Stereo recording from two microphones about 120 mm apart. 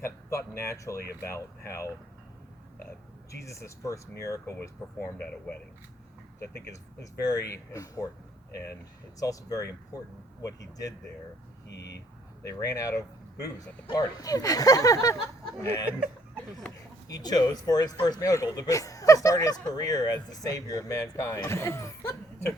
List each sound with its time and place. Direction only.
0.0 s speech: 25° left (ahead or behind)
3.4 s speech: 25° left (ahead or behind)
9.2 s speech: 30° left (ahead or behind)
12.4 s speech: 30° left (ahead or behind)
15.9 s a sound: 10° right (ahead or behind)
17.1 s speech: 35° left (ahead or behind)